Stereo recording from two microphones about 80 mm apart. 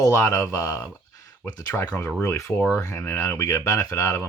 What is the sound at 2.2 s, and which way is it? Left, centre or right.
Speech, left.